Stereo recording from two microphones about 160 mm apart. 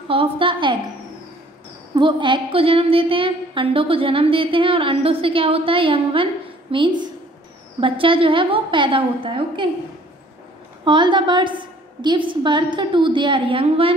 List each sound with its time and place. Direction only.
0.1 s a woman's voice: 35° right (ahead or behind)
2.0 s a woman's voice: 30° right (ahead or behind)
10.8 s a woman's voice: 30° right (ahead or behind)